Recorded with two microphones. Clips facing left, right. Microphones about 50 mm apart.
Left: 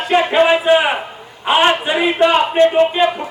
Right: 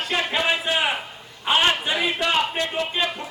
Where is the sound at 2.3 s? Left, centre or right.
Left.